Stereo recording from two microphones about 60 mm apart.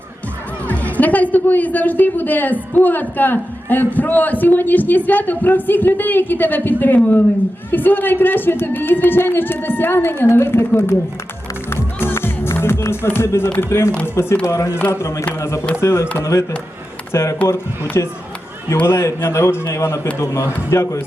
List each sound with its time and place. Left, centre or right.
0.7 s a woman's voice: left
11.7 s music: left
12.9 s a man's voice: left
18.0 s speech: left
18.8 s a man's voice: left